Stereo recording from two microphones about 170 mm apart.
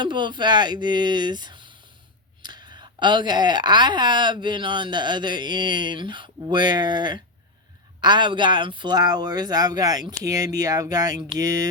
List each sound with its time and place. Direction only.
0.0 s speech: 25° right (ahead or behind)